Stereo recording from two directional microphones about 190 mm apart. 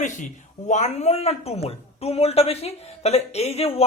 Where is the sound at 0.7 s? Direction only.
35° left (ahead or behind).